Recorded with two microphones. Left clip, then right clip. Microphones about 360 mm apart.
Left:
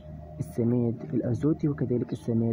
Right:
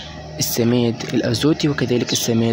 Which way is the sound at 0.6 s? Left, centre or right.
Left.